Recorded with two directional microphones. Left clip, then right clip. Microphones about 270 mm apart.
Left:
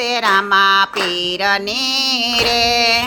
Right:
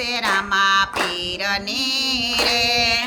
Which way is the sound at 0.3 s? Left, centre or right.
Centre.